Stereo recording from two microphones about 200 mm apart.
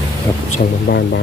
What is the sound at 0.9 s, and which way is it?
Speech, 50° left (ahead or behind).